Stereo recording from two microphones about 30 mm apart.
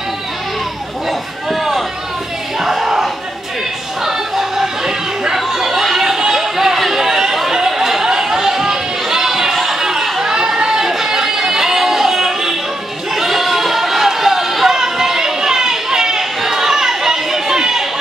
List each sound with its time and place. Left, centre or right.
2.6 s crowd: centre
4.0 s music: centre
5.3 s chatter: centre
10.2 s chatter: right
13.1 s a sound: centre